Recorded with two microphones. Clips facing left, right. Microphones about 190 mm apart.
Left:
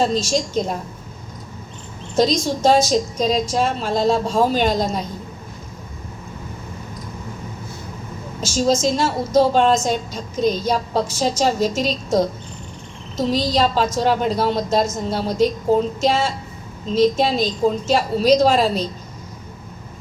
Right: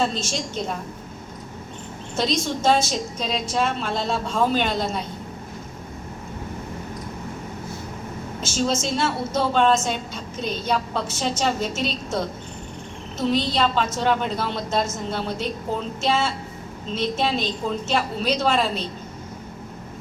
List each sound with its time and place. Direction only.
0.0 s a woman's voice: 40° left (ahead or behind)
2.1 s a woman's voice: 40° left (ahead or behind)
8.4 s a woman's voice: 35° left (ahead or behind)